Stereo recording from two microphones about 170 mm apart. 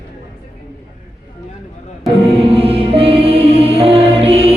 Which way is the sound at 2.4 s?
35° right (ahead or behind).